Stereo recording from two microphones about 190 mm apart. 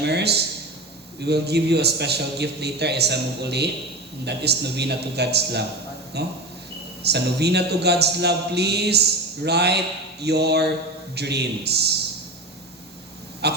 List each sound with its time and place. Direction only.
0.0 s a man's voice: 60° right (ahead or behind)
13.4 s honk: 60° right (ahead or behind)